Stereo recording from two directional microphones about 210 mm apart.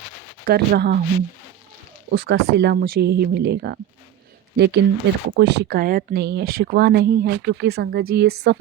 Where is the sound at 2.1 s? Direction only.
55° right (ahead or behind).